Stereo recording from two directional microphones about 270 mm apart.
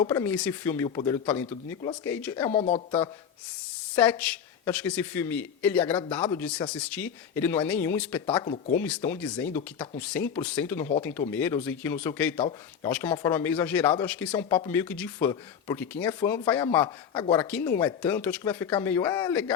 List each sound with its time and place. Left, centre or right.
0.0 s a man's voice: centre
2.5 s speech: left
3.9 s a man's voice: centre